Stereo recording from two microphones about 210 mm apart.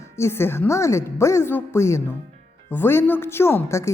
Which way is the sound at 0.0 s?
10° left (ahead or behind).